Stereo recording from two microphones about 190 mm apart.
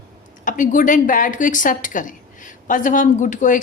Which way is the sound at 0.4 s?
40° left (ahead or behind).